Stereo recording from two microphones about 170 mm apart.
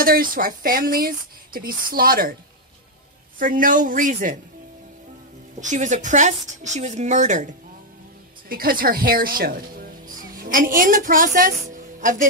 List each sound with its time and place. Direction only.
0.0 s speech: 55° right (ahead or behind)
3.3 s speech: 55° right (ahead or behind)
5.6 s speech: 45° right (ahead or behind)
8.5 s speech: 60° right (ahead or behind)